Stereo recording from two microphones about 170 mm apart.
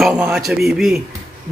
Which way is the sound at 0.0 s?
5° right (ahead or behind).